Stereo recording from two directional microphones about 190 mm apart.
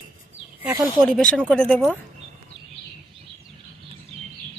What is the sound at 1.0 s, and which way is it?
Speech, 5° left (ahead or behind).